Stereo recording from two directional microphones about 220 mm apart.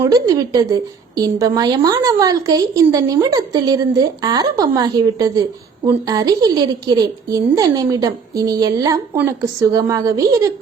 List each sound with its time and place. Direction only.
0.0 s a woman's voice: 15° right (ahead or behind)